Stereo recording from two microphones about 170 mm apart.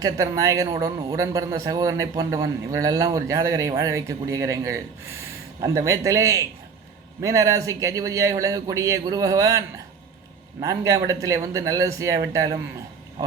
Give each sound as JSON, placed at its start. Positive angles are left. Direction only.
{"t": 0.0, "sound": "a man's voice", "side_deg": -20}